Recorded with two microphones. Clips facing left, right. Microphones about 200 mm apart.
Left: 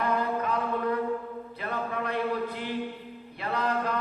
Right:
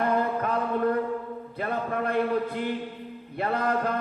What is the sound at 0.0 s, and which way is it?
Chant, 50° right (ahead or behind).